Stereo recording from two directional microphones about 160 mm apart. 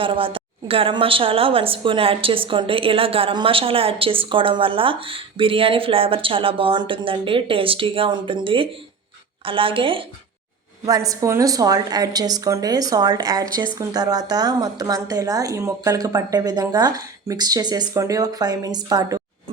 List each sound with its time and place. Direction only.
0.0 s a woman's voice: 35° right (ahead or behind)
10.8 s a woman's voice: 20° right (ahead or behind)